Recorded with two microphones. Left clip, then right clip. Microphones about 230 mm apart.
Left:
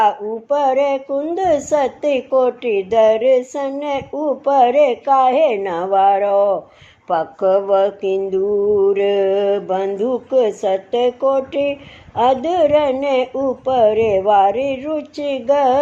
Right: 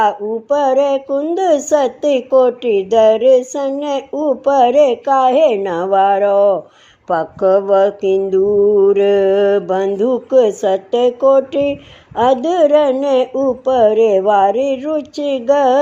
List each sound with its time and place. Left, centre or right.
0.0 s mantra: right